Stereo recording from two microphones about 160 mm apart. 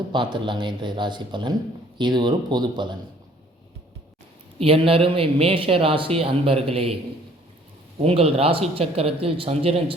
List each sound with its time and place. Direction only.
0.1 s speech: 30° right (ahead or behind)
4.6 s a man's voice: 35° right (ahead or behind)
8.0 s a man's voice: 35° right (ahead or behind)